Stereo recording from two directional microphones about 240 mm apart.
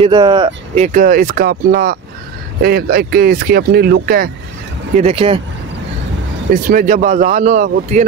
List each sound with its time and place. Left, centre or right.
0.0 s speech: centre
0.7 s speech: right
4.9 s speech: right
6.5 s speech: right